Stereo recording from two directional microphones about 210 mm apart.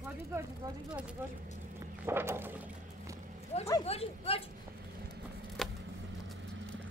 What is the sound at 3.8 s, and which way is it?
Speech, 30° left (ahead or behind).